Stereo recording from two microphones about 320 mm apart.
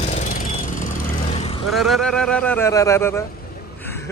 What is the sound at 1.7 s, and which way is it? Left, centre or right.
A man's voice, centre.